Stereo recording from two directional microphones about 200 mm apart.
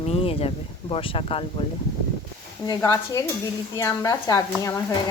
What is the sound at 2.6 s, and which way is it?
Speech, 15° left (ahead or behind).